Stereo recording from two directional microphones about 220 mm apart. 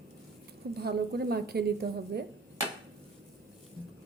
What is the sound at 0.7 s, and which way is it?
A woman's voice, 45° right (ahead or behind).